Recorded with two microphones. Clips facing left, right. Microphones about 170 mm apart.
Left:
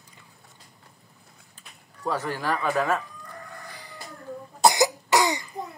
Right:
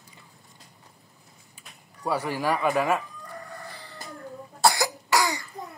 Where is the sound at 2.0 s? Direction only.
10° right (ahead or behind).